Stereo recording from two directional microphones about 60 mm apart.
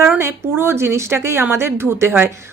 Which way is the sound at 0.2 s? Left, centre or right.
Right.